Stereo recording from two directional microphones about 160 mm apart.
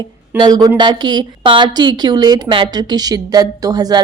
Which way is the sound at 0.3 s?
25° right (ahead or behind).